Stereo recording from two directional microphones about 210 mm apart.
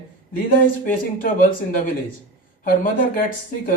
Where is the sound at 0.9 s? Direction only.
40° left (ahead or behind).